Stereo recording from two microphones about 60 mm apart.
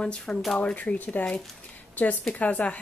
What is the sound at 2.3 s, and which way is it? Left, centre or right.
Speech, left.